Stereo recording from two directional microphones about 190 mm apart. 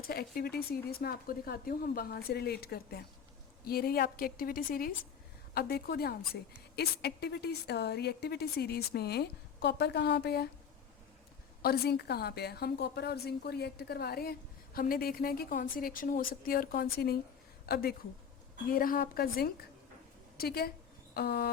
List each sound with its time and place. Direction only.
0.1 s a woman's voice: 55° left (ahead or behind)
11.6 s a woman's voice: 55° left (ahead or behind)
21.1 s a sound: 55° left (ahead or behind)